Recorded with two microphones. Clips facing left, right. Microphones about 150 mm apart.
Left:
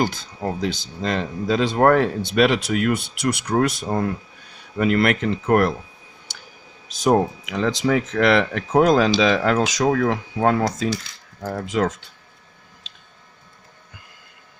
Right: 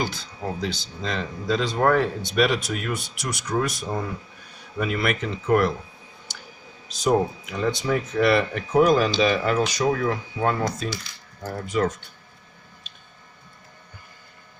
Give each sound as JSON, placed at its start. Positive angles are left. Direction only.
{"t": 0.0, "sound": "speech", "side_deg": 50}
{"t": 7.4, "sound": "speech", "side_deg": 85}
{"t": 12.9, "sound": "a sound", "side_deg": 90}